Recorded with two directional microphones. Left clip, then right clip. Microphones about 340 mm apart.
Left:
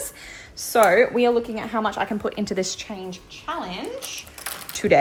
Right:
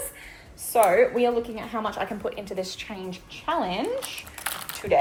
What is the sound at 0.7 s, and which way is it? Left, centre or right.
A woman's voice, left.